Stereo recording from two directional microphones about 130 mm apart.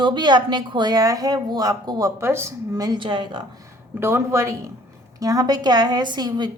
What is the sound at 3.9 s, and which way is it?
A woman's voice, 20° right (ahead or behind).